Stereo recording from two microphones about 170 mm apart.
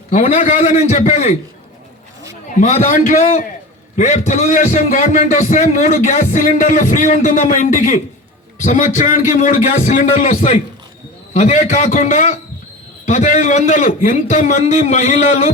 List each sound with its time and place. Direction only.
0.1 s a man's voice: 45° left (ahead or behind)
2.5 s a man's voice: 45° left (ahead or behind)